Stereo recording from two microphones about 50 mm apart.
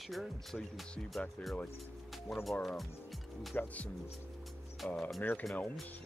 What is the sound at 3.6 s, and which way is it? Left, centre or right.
Speech, left.